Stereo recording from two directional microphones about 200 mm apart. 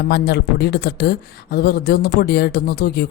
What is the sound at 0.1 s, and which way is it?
Speech, 55° left (ahead or behind).